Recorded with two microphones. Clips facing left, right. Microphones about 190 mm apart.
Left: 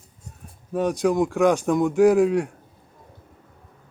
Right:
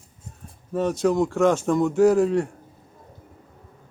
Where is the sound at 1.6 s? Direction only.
Centre (ahead or behind).